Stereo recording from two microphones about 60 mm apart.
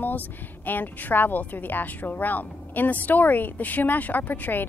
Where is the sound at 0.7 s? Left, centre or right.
Left.